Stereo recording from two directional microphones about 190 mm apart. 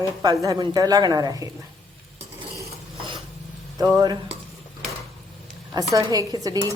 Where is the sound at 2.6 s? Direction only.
25° right (ahead or behind).